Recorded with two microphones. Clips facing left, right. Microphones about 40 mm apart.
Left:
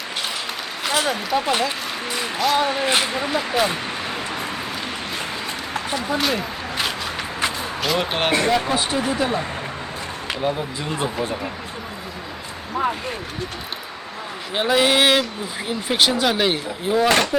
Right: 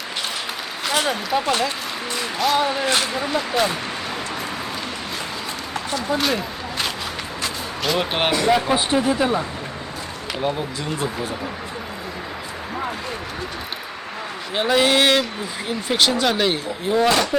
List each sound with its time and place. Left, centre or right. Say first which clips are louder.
1.0 s speech: even; centre
2.8 s speech: left 1 dB; centre
6.1 s a sound: right 2 dB; centre
7.8 s speech: right 1 dB; centre
10.4 s speech: even; centre
10.9 s speech: left 3 dB; left
14.5 s speech: even; centre